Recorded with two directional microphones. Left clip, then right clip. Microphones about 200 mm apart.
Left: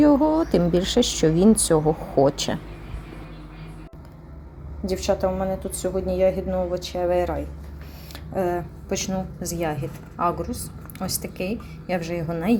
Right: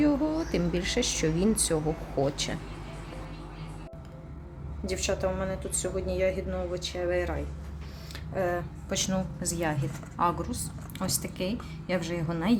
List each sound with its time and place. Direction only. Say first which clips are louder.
0.0 s speech: left 9 dB; 20° left (ahead or behind)
4.9 s a woman's voice: left 7 dB; 10° left (ahead or behind)
8.4 s a woman's voice: left 5 dB; 10° left (ahead or behind)